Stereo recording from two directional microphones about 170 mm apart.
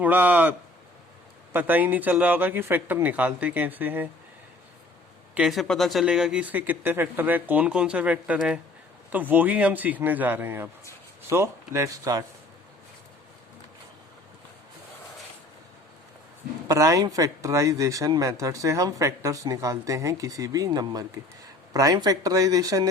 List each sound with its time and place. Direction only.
0.0 s speech: 10° right (ahead or behind)
1.5 s speech: 10° right (ahead or behind)
5.3 s speech: 5° right (ahead or behind); by 12.2 s 20° right (ahead or behind)
16.6 s speech: 20° right (ahead or behind)